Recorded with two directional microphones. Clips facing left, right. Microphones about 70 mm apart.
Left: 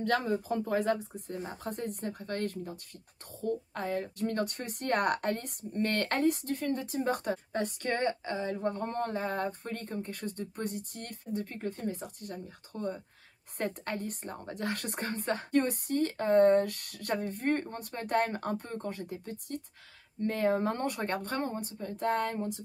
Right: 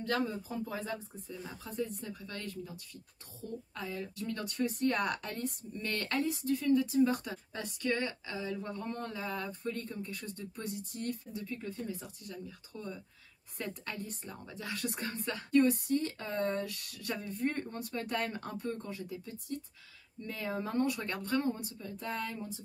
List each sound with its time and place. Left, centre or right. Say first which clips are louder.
0.0 s a woman's voice: left 4 dB; left
1.2 s a woman's voice: left 7 dB; left